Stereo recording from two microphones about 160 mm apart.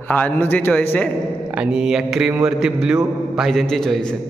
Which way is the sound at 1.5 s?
5° right (ahead or behind).